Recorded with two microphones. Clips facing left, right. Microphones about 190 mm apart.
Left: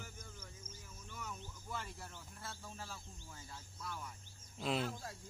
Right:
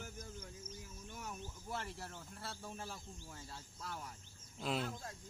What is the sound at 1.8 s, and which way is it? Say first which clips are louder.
Speech: right 2 dB; 40° right (ahead or behind).